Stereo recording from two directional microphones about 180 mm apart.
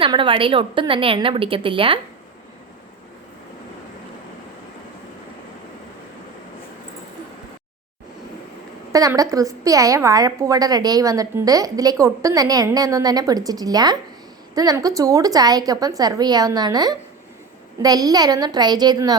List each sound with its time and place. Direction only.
0.0 s a woman's voice: 30° right (ahead or behind)
8.9 s a woman's voice: 20° right (ahead or behind)